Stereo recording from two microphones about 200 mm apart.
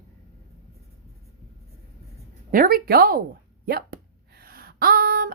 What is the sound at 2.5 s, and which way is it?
A woman's voice, 45° right (ahead or behind).